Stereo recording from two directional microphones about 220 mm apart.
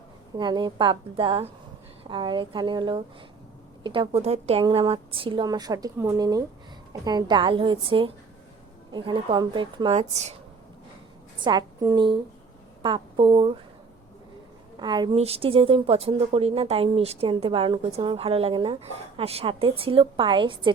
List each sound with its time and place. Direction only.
0.3 s a woman's voice: 20° right (ahead or behind)
11.4 s a woman's voice: 20° right (ahead or behind)
14.8 s a woman's voice: 20° right (ahead or behind)